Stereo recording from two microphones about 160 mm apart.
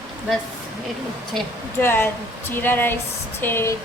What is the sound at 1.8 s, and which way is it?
A woman's voice, 15° left (ahead or behind).